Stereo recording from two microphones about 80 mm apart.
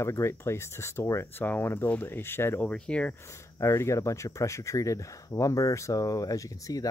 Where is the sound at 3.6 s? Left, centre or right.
Left.